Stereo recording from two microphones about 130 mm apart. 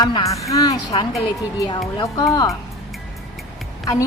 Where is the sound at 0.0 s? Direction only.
30° left (ahead or behind).